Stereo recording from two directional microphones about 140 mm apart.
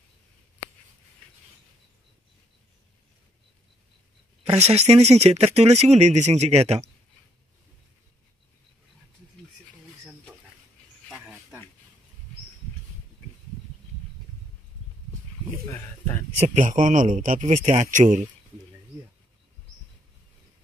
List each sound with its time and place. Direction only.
4.5 s speech: 50° right (ahead or behind)
16.3 s speech: 55° right (ahead or behind)